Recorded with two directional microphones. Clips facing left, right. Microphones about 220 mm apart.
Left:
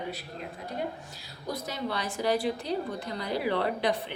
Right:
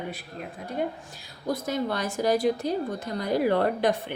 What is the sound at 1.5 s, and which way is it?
Speech, 50° right (ahead or behind).